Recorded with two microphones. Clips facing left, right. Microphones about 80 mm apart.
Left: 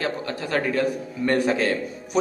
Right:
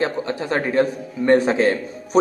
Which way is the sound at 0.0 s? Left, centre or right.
Right.